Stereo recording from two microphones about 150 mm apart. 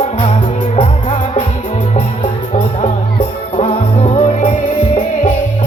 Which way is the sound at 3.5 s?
40° left (ahead or behind).